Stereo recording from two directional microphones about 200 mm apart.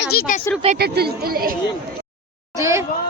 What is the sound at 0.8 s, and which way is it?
Speech, 50° right (ahead or behind).